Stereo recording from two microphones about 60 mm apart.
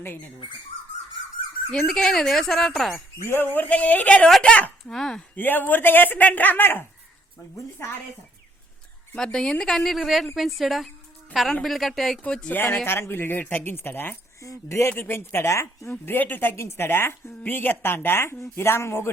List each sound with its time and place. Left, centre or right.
1.9 s speech: centre
3.2 s speech: left
4.3 s speech: centre
5.3 s a woman's voice: left
9.1 s a woman's voice: centre
12.2 s speech: centre
12.5 s a woman's voice: left
14.7 s speech: left
14.9 s a woman's voice: left
15.9 s a woman's voice: left